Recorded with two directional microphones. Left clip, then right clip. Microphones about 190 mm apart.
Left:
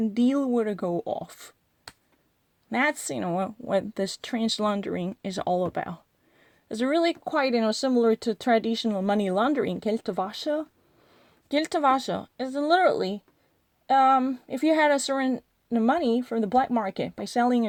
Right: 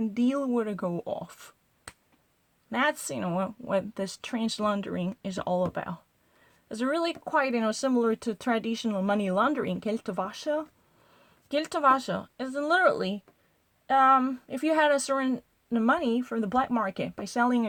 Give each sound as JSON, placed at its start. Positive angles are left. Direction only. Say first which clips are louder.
{"t": 0.0, "sound": "speech", "louder": "left 3 dB", "side_deg": 35}
{"t": 2.6, "sound": "speech", "louder": "left 2 dB", "side_deg": 35}